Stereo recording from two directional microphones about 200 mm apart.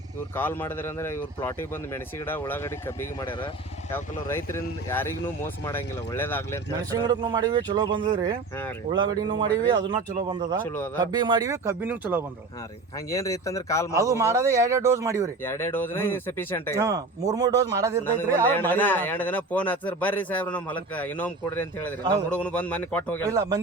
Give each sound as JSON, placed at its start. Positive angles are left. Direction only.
{"t": 0.3, "sound": "a man's voice", "side_deg": 10}
{"t": 6.9, "sound": "speech", "side_deg": -20}
{"t": 10.6, "sound": "a man's voice", "side_deg": 10}
{"t": 11.0, "sound": "speech", "side_deg": -20}
{"t": 13.1, "sound": "a man's voice", "side_deg": 15}
{"t": 14.1, "sound": "speech", "side_deg": -15}
{"t": 15.4, "sound": "a man's voice", "side_deg": 10}
{"t": 16.7, "sound": "speech", "side_deg": -15}
{"t": 18.0, "sound": "a man's voice", "side_deg": 10}
{"t": 23.2, "sound": "speech", "side_deg": -15}